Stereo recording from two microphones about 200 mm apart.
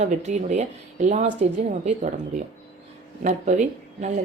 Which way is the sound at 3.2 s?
40° right (ahead or behind).